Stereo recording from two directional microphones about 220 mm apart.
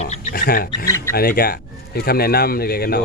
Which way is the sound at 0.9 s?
10° left (ahead or behind).